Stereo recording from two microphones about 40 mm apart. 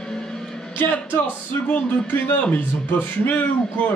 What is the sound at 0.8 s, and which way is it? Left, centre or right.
Speech, left.